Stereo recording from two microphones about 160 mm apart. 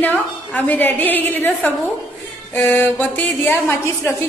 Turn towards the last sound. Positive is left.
turn(degrees=15)  # may be behind; listen again after turning